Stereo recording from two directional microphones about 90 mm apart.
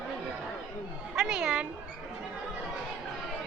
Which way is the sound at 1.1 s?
5° right (ahead or behind).